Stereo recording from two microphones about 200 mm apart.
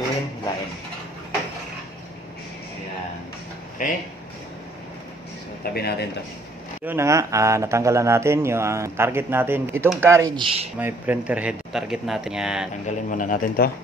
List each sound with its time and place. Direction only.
3.8 s a man's voice: 40° left (ahead or behind)
5.6 s speech: 50° left (ahead or behind)
6.9 s speech: 15° right (ahead or behind)
12.8 s a man's voice: 40° left (ahead or behind)